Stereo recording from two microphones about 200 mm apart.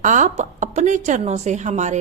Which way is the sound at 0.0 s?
40° right (ahead or behind).